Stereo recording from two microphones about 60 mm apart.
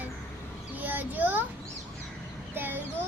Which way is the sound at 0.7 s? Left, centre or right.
Right.